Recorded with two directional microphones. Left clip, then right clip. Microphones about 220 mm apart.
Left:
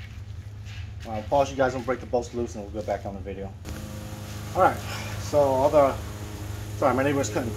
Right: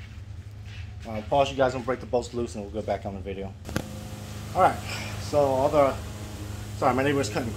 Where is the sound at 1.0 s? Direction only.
25° right (ahead or behind).